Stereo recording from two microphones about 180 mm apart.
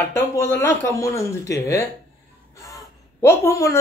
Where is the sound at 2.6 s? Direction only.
15° left (ahead or behind).